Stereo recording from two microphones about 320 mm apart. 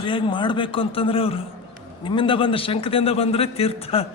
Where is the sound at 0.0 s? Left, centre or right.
Centre.